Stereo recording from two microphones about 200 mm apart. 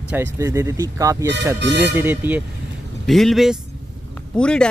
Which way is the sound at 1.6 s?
60° right (ahead or behind).